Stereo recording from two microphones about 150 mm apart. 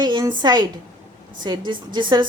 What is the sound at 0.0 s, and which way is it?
A woman's voice, 30° right (ahead or behind).